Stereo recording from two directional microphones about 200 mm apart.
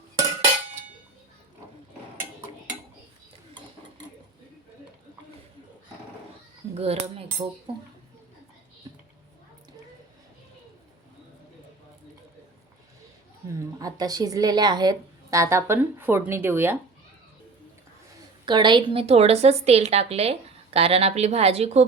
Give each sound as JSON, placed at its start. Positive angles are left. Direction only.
{"t": 6.7, "sound": "speech", "side_deg": -30}
{"t": 13.5, "sound": "speech", "side_deg": -15}
{"t": 18.4, "sound": "a woman's voice", "side_deg": -25}